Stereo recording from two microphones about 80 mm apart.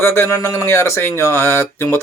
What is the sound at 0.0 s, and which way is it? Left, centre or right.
Speech, left.